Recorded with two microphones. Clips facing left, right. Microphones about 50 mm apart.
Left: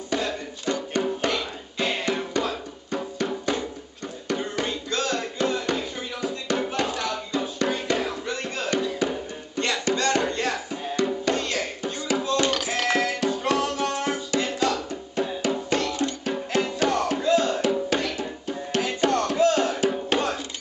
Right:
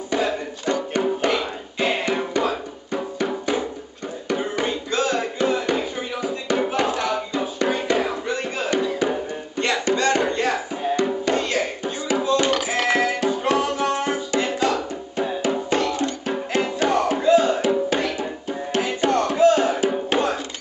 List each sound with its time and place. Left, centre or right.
0.2 s music: centre
4.3 s a sound: centre
9.0 s music: centre